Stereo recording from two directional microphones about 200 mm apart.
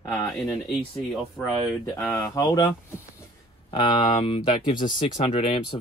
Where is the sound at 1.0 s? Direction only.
Centre (ahead or behind).